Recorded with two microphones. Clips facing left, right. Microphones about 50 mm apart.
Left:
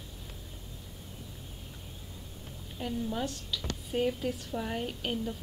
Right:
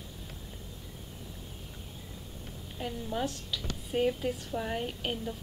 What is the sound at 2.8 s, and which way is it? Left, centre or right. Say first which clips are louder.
A woman's voice: even; centre.